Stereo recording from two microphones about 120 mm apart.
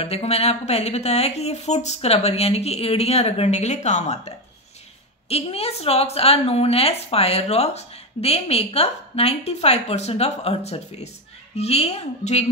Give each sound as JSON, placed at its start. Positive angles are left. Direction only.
{"t": 0.0, "sound": "a woman's voice", "side_deg": 55}
{"t": 5.3, "sound": "a woman's voice", "side_deg": 55}